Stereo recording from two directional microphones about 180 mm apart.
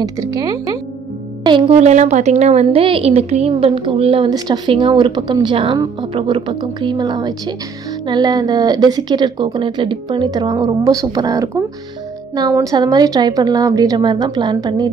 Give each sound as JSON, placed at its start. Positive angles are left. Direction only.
{"t": 0.0, "sound": "speech", "side_deg": -20}